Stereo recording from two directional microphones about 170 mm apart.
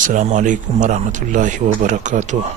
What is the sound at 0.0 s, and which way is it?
Speech, 50° right (ahead or behind).